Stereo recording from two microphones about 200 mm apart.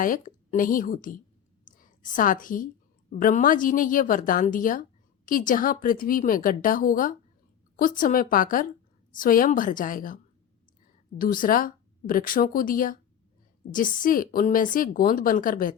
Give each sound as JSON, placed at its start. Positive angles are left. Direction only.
{"t": 0.0, "sound": "a woman's voice", "side_deg": 40}
{"t": 1.6, "sound": "a sound", "side_deg": 40}
{"t": 3.1, "sound": "a woman's voice", "side_deg": 45}
{"t": 11.2, "sound": "a woman's voice", "side_deg": 45}